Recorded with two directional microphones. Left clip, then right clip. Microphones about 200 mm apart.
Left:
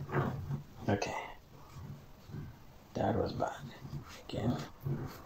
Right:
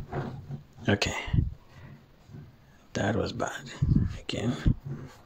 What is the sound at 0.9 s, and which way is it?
Speech, 45° right (ahead or behind).